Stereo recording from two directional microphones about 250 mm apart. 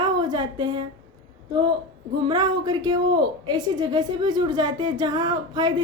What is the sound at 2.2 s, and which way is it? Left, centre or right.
A woman's voice, centre.